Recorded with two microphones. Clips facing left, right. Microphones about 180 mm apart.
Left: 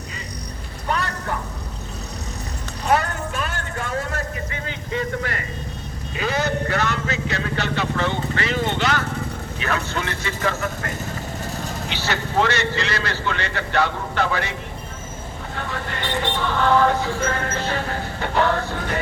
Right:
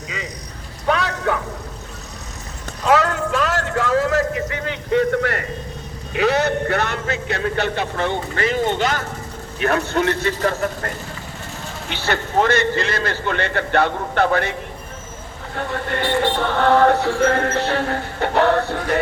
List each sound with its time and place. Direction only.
0.9 s vehicle: 90° right
2.8 s a sound: 90° right; by 5.5 s 60° right (ahead or behind)
6.1 s vehicle: 65° right (ahead or behind); by 9.0 s 45° right (ahead or behind)
9.6 s a man's voice: 55° right (ahead or behind)
15.9 s speech: 55° right (ahead or behind)